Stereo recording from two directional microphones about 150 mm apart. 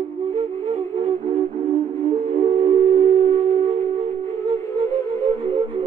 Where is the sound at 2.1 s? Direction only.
50° right (ahead or behind).